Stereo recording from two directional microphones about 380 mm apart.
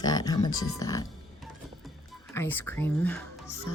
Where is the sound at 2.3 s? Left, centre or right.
Centre.